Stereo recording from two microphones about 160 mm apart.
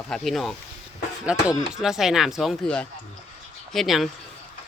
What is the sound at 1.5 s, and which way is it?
Speech, 20° left (ahead or behind).